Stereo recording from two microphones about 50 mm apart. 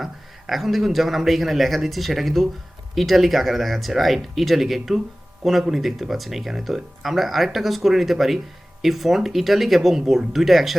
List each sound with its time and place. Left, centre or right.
0.0 s a man's voice: centre